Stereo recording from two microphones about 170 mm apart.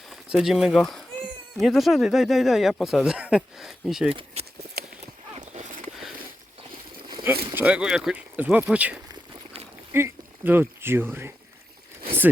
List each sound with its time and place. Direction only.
0.1 s speech: 5° right (ahead or behind)
4.1 s speech: 30° right (ahead or behind)
4.8 s clip-clop: 65° right (ahead or behind)
5.4 s a sound: 45° right (ahead or behind)
7.5 s speech: 10° right (ahead or behind)